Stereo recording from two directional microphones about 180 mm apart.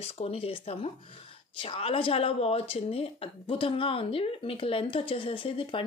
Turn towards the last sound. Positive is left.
turn(degrees=30)  # may be behind; listen again after turning